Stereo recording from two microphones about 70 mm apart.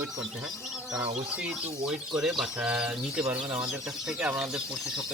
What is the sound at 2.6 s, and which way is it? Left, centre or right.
Speech, centre.